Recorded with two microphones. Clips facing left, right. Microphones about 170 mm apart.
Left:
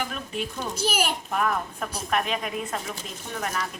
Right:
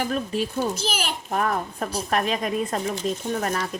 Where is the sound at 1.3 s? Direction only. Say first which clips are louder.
Right 2 dB; 35° right (ahead or behind).